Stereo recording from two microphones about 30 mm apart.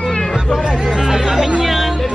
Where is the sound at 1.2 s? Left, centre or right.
Centre.